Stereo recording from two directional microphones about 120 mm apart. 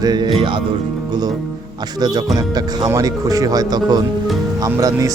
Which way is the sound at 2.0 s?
35° right (ahead or behind).